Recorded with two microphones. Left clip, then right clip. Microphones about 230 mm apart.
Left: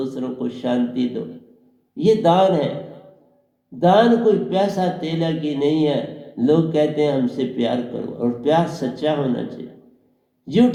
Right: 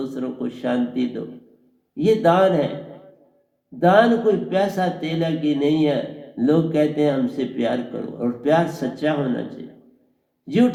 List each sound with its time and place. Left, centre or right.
0.0 s a sound: right
2.0 s a man's voice: right
3.8 s a man's voice: right